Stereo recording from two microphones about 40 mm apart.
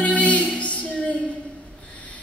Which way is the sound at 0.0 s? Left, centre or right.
Left.